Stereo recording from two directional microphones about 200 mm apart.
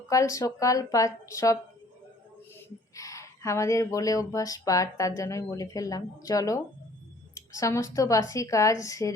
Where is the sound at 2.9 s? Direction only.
15° left (ahead or behind).